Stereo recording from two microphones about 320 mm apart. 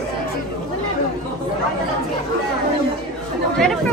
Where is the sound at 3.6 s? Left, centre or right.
Centre.